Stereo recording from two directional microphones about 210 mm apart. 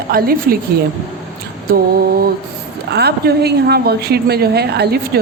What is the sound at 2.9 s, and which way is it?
A woman's voice, 50° right (ahead or behind).